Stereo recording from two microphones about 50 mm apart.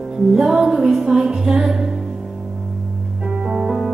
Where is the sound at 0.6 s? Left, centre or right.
Centre.